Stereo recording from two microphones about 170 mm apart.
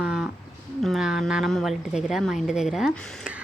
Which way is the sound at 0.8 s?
Centre (ahead or behind).